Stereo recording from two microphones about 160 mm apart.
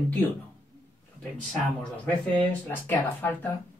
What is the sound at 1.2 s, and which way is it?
Speech, 5° left (ahead or behind).